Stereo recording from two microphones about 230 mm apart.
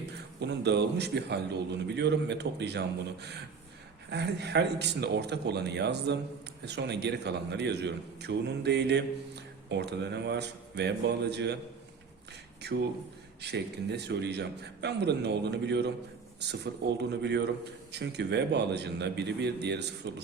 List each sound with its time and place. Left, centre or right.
0.3 s a man's voice: right
12.6 s a man's voice: right
17.0 s a man's voice: right